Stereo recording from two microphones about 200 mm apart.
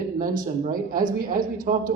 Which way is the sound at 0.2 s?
45° right (ahead or behind).